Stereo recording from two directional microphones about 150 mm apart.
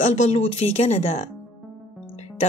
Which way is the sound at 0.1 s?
45° left (ahead or behind).